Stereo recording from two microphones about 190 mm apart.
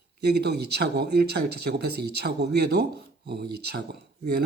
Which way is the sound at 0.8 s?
60° right (ahead or behind).